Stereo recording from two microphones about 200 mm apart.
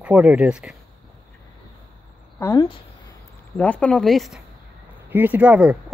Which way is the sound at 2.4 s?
20° left (ahead or behind).